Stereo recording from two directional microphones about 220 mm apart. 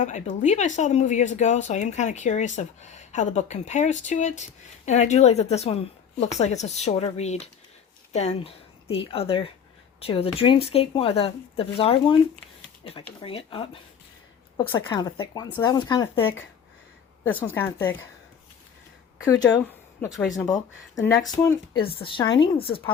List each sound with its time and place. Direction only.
0.0 s a woman's voice: 35° left (ahead or behind); by 16.4 s 20° left (ahead or behind)
17.4 s speech: 10° left (ahead or behind)
19.5 s a woman's voice: 5° left (ahead or behind)
20.3 s a woman's voice: 15° left (ahead or behind)